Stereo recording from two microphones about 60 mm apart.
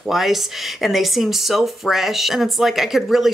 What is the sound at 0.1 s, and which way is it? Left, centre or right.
A woman's voice, centre.